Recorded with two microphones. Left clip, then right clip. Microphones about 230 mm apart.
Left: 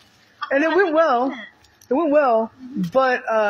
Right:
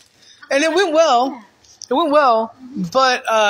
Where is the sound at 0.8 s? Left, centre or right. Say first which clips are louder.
Right 4 dB; centre.